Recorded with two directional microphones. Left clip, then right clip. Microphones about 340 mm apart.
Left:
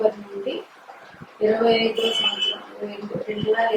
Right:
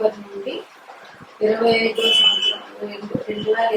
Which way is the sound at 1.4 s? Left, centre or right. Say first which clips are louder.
Right 2 dB; centre.